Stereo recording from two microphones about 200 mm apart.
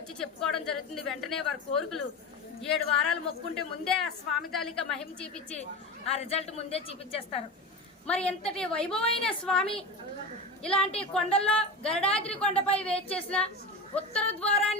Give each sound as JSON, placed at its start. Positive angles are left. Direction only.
{"t": 0.2, "sound": "a woman's voice", "side_deg": 5}
{"t": 6.1, "sound": "a woman's voice", "side_deg": 30}
{"t": 8.0, "sound": "a woman's voice", "side_deg": 5}